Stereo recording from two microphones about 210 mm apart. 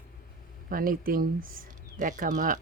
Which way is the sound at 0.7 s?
45° right (ahead or behind).